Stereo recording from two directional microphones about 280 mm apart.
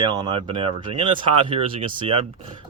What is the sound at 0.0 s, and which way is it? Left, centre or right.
Speech, centre.